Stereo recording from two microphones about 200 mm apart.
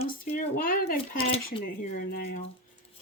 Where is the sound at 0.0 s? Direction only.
40° left (ahead or behind).